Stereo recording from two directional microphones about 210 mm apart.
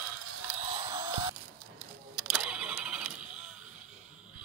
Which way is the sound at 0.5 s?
30° right (ahead or behind).